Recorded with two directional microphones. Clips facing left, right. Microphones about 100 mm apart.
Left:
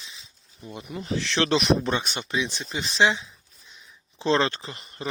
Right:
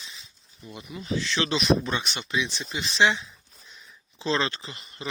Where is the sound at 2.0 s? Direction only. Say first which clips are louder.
Left 2 dB; 15° left (ahead or behind).